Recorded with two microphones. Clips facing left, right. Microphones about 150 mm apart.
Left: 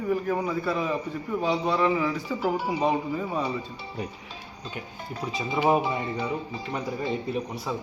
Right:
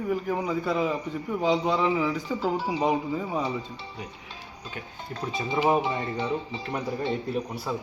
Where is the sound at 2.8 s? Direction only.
15° right (ahead or behind).